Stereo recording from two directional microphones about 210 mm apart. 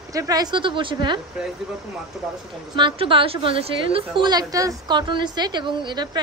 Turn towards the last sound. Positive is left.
turn(degrees=-20)  # may be behind; listen again after turning